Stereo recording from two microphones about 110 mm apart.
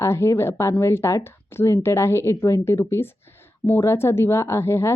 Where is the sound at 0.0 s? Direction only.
25° left (ahead or behind).